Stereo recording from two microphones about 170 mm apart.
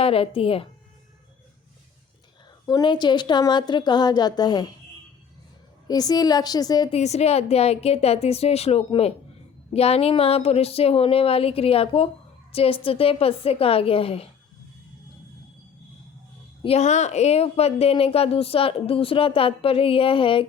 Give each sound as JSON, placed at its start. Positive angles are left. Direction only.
{"t": 0.0, "sound": "a woman's voice", "side_deg": 35}
{"t": 2.6, "sound": "a woman's voice", "side_deg": 25}
{"t": 5.9, "sound": "a woman's voice", "side_deg": 20}
{"t": 6.9, "sound": "a woman's voice", "side_deg": 40}
{"t": 16.6, "sound": "a woman's voice", "side_deg": 40}